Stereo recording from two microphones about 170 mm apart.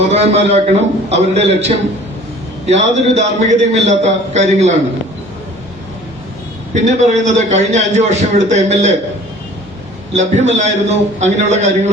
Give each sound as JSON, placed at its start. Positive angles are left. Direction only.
{"t": 0.0, "sound": "a man's voice", "side_deg": -40}
{"t": 2.6, "sound": "a man's voice", "side_deg": -40}
{"t": 6.8, "sound": "a man's voice", "side_deg": -45}
{"t": 10.1, "sound": "a man's voice", "side_deg": -40}